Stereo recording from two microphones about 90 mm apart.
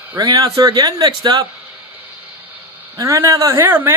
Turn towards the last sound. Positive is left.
turn(degrees=-25)  # may be behind; listen again after turning